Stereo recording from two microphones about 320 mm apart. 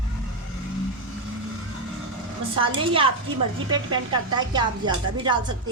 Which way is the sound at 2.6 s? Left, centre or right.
Centre.